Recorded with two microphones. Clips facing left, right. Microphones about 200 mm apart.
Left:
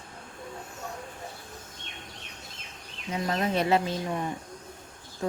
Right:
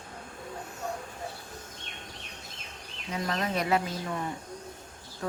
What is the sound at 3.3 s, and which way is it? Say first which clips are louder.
Speech: left 3 dB; 25° left (ahead or behind).